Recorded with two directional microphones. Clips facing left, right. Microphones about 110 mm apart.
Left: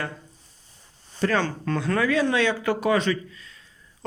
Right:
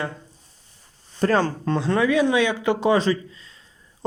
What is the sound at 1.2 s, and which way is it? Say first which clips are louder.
Speech: right 4 dB; 35° right (ahead or behind).